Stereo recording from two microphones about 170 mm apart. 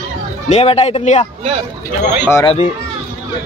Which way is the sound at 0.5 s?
35° left (ahead or behind).